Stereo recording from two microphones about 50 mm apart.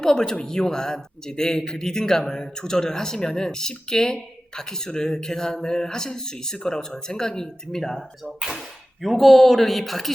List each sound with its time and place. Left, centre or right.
0.0 s speech: centre
8.4 s speech: centre